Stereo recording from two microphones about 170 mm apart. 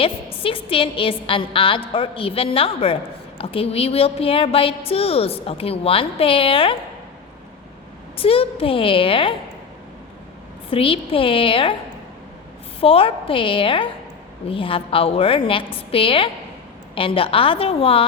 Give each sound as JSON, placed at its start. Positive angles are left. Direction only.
{"t": 0.0, "sound": "a woman's voice", "side_deg": 35}
{"t": 8.1, "sound": "a woman's voice", "side_deg": 35}
{"t": 10.7, "sound": "a woman's voice", "side_deg": 30}
{"t": 12.8, "sound": "a woman's voice", "side_deg": 35}